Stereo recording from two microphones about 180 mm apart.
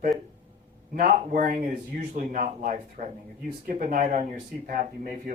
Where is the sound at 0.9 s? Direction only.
50° right (ahead or behind).